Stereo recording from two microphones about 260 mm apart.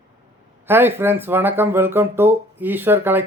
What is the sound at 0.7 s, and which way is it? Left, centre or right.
Speech, centre.